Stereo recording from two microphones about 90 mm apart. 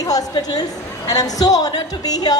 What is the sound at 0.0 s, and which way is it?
A woman's voice, 45° left (ahead or behind).